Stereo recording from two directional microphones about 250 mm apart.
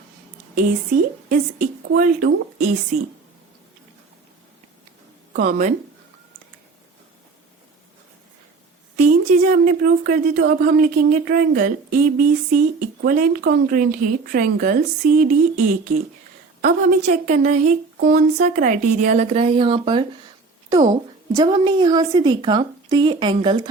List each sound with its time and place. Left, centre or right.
1.3 s a woman's voice: right
5.3 s speech: right
9.0 s a woman's voice: right